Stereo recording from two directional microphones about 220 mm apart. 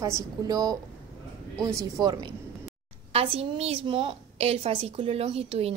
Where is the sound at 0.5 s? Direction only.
15° right (ahead or behind).